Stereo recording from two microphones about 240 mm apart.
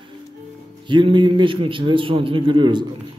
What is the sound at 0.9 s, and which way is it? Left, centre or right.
A man's voice, centre.